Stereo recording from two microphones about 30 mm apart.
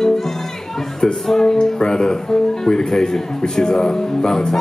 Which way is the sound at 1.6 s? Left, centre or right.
Left.